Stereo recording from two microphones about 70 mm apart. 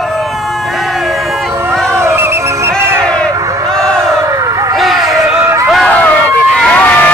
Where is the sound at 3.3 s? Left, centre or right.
Right.